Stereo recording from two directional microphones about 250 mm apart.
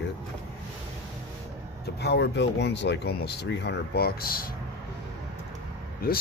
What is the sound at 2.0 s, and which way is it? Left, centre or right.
Speech, left.